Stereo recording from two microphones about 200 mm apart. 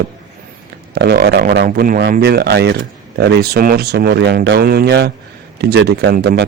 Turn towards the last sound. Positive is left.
turn(degrees=-50)  # may be behind; listen again after turning